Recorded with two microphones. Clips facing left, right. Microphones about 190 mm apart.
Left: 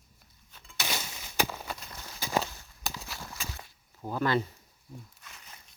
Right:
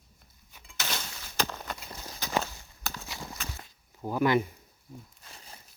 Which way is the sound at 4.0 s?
10° right (ahead or behind).